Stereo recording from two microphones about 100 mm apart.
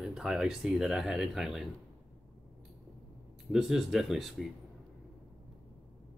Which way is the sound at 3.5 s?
5° right (ahead or behind).